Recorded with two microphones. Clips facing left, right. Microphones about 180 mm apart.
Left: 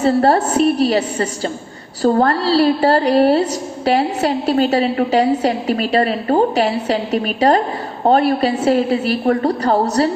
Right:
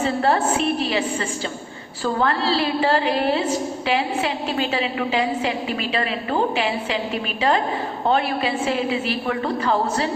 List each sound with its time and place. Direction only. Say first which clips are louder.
0.0 s a woman's voice: left 6 dB; 40° left (ahead or behind)